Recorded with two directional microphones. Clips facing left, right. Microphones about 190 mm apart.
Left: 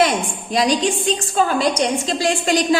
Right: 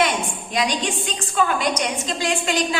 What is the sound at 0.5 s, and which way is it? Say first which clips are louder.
A woman's voice: left 6 dB; 35° left (ahead or behind).